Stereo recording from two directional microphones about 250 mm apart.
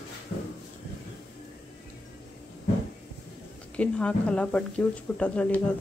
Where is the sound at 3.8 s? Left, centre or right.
Centre.